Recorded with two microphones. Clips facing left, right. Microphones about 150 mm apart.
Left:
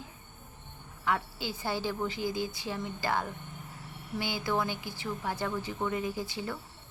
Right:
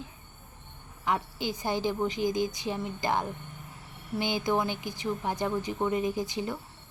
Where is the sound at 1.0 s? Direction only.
20° right (ahead or behind).